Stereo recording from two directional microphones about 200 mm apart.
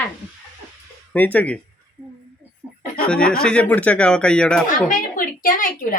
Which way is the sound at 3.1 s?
5° left (ahead or behind).